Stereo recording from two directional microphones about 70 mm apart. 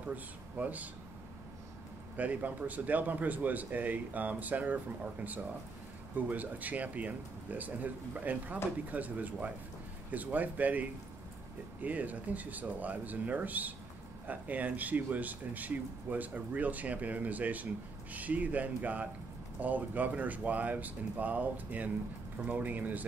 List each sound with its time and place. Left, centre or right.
0.1 s speech: right
2.1 s speech: right
6.1 s speech: right